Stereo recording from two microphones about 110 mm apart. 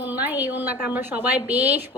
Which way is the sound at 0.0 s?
15° right (ahead or behind).